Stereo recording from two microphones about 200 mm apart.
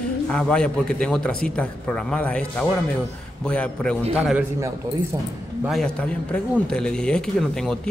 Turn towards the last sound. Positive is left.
turn(degrees=5)  # may be behind; listen again after turning